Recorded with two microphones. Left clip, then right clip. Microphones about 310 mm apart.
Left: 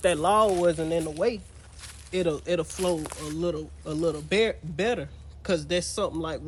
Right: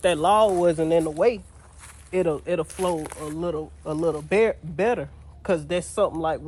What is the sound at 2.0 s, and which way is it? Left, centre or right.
Speech, centre.